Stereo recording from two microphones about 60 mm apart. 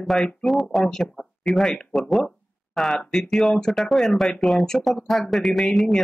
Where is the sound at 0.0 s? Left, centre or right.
Centre.